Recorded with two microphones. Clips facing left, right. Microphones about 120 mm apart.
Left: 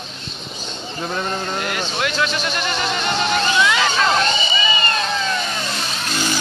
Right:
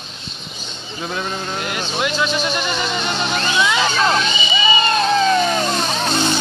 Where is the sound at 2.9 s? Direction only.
15° right (ahead or behind).